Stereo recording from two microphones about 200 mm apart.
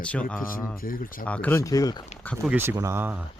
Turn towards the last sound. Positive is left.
turn(degrees=-10)  # may be behind; listen again after turning